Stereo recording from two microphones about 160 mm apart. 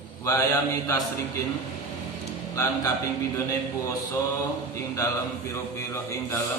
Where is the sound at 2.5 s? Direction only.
20° left (ahead or behind).